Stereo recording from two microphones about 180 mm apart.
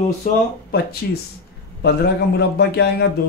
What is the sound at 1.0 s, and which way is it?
Speech, 60° left (ahead or behind).